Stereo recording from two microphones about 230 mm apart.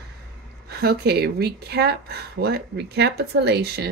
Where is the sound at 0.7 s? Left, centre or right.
Right.